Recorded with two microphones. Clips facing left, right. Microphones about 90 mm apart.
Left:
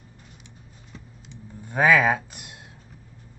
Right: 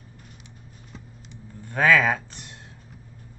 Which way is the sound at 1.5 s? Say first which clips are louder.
Left 1 dB; 15° left (ahead or behind).